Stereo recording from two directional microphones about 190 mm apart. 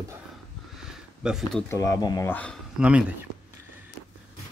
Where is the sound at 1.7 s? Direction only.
15° left (ahead or behind).